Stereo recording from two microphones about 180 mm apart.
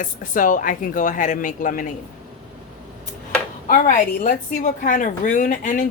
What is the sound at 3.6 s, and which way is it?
Speech, 50° left (ahead or behind).